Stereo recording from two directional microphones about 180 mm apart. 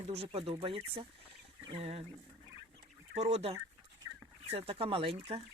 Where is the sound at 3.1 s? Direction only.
35° right (ahead or behind).